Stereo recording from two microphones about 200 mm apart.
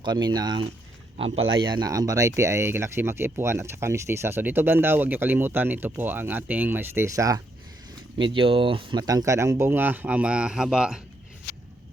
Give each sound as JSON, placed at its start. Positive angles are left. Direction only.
{"t": 0.0, "sound": "speech", "side_deg": -20}